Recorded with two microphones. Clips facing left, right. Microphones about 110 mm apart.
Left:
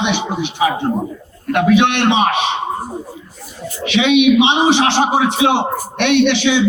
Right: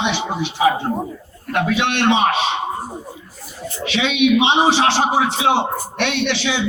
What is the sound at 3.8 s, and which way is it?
A woman's voice, 20° left (ahead or behind).